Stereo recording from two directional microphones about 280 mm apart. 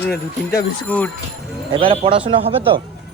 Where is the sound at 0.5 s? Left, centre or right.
Centre.